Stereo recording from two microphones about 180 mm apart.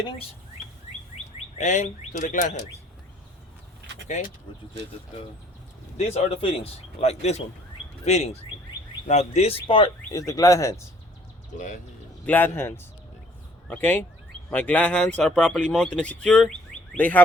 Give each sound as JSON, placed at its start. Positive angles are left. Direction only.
{"t": 1.5, "sound": "speech", "side_deg": 40}
{"t": 6.0, "sound": "speech", "side_deg": 40}
{"t": 12.2, "sound": "speech", "side_deg": 10}